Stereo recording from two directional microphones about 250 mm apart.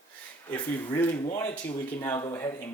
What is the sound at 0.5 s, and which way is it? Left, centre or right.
Speech, centre.